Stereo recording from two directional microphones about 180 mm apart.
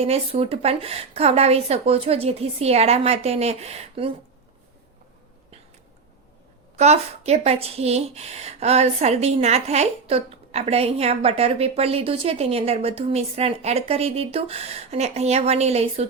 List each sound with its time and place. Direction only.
0.0 s speech: 35° right (ahead or behind)
6.7 s speech: 35° right (ahead or behind)